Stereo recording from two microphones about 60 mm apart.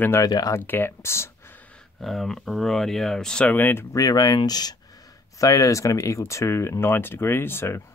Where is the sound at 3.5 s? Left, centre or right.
Left.